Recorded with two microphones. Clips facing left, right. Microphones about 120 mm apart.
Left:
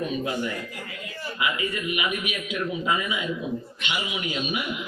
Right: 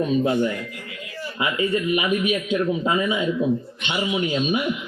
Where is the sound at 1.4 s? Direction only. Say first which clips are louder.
Right 6 dB; 30° right (ahead or behind).